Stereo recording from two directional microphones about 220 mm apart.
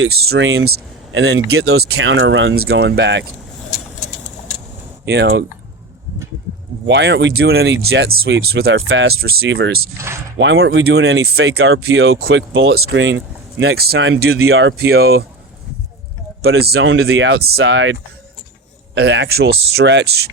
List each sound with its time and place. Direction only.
0.3 s speech: 55° right (ahead or behind)
5.0 s speech: 50° right (ahead or behind)
6.8 s speech: 50° right (ahead or behind)
16.4 s speech: 50° right (ahead or behind)
18.9 s speech: 50° right (ahead or behind)